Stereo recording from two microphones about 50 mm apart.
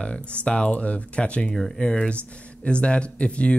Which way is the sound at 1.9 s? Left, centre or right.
Left.